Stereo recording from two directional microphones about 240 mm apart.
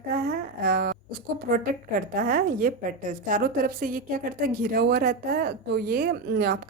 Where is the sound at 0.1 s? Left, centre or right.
Right.